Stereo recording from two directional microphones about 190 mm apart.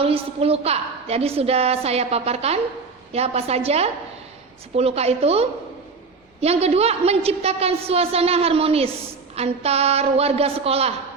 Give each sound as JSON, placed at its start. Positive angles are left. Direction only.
{"t": 0.0, "sound": "a woman's voice", "side_deg": -30}